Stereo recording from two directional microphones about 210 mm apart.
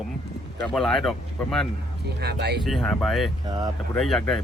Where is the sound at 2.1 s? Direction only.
50° right (ahead or behind).